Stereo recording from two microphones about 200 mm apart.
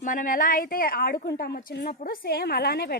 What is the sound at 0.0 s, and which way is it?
Speech, 40° left (ahead or behind).